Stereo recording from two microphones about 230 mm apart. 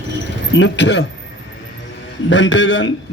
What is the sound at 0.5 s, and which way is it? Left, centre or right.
Speech, left.